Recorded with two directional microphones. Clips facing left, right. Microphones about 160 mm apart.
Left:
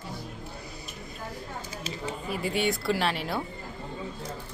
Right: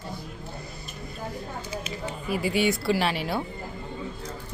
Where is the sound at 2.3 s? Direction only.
5° right (ahead or behind).